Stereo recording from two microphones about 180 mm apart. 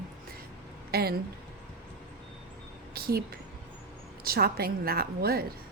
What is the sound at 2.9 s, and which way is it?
A woman's voice, 60° right (ahead or behind).